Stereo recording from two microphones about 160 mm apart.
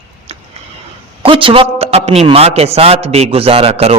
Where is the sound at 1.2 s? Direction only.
35° right (ahead or behind).